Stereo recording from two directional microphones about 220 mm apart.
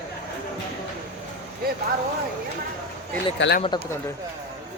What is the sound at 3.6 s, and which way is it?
Speech, 25° left (ahead or behind).